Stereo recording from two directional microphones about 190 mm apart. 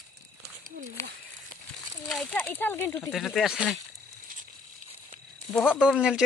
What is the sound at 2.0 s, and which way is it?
Speech, 5° left (ahead or behind).